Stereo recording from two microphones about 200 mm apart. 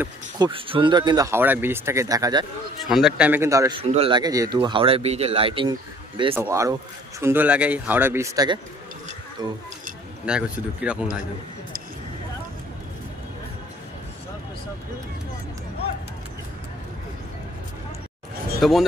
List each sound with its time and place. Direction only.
0.4 s speech: 25° right (ahead or behind)
2.9 s speech: centre (ahead or behind)
3.8 s speech: 30° right (ahead or behind)
6.3 s speech: 15° right (ahead or behind)
10.2 s speech: 5° right (ahead or behind)
18.6 s speech: centre (ahead or behind)